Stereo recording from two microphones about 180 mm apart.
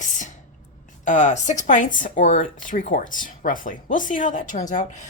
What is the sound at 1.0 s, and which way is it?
Speech, 45° left (ahead or behind).